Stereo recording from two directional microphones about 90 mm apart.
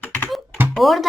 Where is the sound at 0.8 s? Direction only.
Centre (ahead or behind).